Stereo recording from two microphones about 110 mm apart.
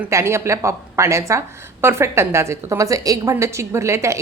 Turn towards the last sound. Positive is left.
turn(degrees=-25)  # may be behind; listen again after turning